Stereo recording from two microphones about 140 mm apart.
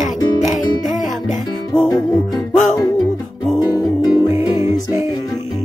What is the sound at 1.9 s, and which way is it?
Music, 25° left (ahead or behind).